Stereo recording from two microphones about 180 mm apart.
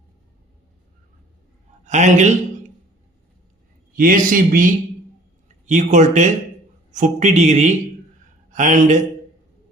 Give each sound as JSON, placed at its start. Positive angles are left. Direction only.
{"t": 1.8, "sound": "speech", "side_deg": -40}
{"t": 3.9, "sound": "speech", "side_deg": -50}